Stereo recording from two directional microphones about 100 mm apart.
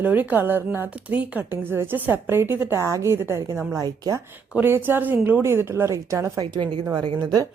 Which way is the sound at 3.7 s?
35° right (ahead or behind).